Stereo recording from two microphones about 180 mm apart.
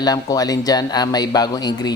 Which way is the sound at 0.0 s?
20° left (ahead or behind).